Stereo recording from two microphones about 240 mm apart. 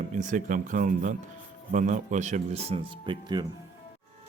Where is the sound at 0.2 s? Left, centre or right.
Right.